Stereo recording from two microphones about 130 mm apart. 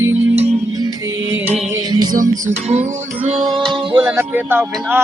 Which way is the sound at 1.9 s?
30° right (ahead or behind).